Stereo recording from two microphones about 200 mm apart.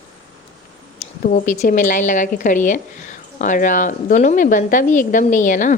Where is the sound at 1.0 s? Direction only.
40° left (ahead or behind).